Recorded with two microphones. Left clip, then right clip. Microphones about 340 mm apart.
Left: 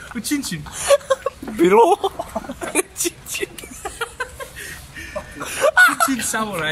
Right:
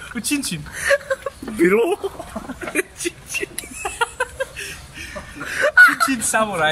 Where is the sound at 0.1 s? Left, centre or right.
Centre.